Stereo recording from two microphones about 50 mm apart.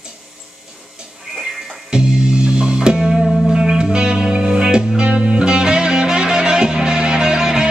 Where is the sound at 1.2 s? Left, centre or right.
Centre.